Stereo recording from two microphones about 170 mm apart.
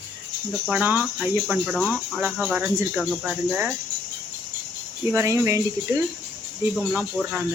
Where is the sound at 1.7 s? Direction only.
10° left (ahead or behind).